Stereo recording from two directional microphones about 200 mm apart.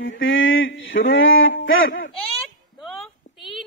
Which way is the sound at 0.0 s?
75° left (ahead or behind).